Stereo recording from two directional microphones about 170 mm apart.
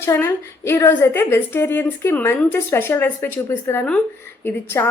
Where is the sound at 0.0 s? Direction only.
15° left (ahead or behind).